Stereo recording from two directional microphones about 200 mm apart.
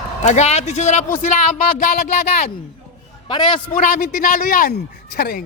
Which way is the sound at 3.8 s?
40° left (ahead or behind).